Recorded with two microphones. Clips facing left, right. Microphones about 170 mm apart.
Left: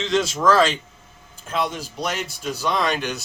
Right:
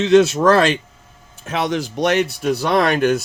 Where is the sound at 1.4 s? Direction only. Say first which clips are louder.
Right 5 dB; 75° right (ahead or behind); by 3.2 s 55° right (ahead or behind).